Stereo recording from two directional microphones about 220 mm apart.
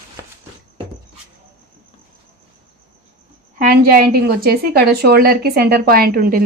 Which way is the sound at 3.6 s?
45° right (ahead or behind).